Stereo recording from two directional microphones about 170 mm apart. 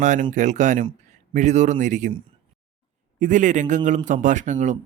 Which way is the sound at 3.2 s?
45° right (ahead or behind).